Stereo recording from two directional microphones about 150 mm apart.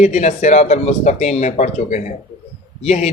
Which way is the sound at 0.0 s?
50° left (ahead or behind).